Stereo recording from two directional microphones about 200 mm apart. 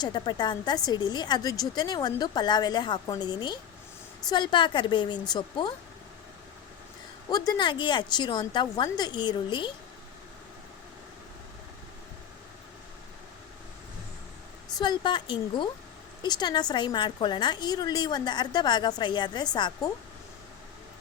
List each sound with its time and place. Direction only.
0.0 s a woman's voice: 20° left (ahead or behind)
7.3 s a woman's voice: 20° left (ahead or behind)
14.8 s a woman's voice: 20° left (ahead or behind)